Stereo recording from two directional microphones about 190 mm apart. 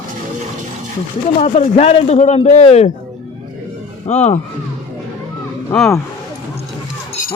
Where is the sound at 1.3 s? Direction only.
35° left (ahead or behind).